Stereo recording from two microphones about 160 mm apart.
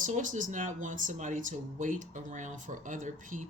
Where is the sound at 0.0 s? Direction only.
50° right (ahead or behind).